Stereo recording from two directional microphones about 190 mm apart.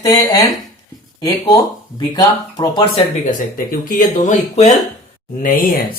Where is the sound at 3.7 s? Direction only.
45° left (ahead or behind).